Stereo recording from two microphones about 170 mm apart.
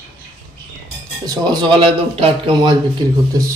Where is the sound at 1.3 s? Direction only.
25° right (ahead or behind).